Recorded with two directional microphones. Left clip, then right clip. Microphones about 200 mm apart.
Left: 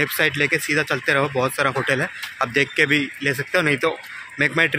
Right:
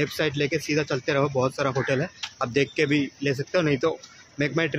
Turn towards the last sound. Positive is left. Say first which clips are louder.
# left 7 dB
turn(degrees=0)  # may be behind; listen again after turning